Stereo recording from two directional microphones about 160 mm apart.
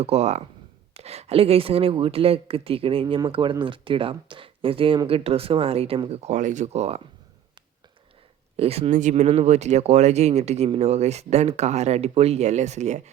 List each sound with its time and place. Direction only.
0.0 s speech: 40° right (ahead or behind)
8.5 s speech: 40° right (ahead or behind)